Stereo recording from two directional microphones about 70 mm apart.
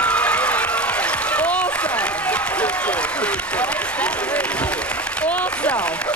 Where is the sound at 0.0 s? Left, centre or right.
Centre.